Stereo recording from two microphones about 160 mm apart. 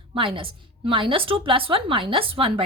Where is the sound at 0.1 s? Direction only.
30° right (ahead or behind).